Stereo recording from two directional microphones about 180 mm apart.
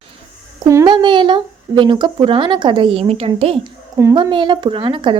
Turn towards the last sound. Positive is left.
turn(degrees=-25)  # may be behind; listen again after turning